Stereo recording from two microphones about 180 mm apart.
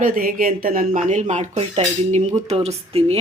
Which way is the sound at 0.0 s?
50° right (ahead or behind).